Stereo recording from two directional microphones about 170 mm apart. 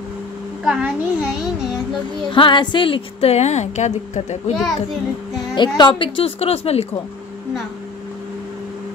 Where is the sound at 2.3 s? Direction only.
30° left (ahead or behind).